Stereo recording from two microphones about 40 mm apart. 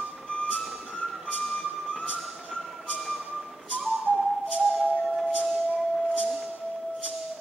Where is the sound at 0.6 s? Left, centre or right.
Centre.